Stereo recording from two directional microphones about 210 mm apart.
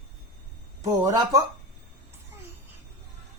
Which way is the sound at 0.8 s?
15° right (ahead or behind).